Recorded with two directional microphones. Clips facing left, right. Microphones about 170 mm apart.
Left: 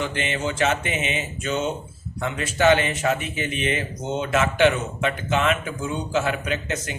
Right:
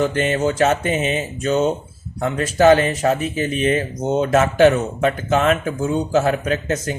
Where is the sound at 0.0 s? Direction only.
40° right (ahead or behind).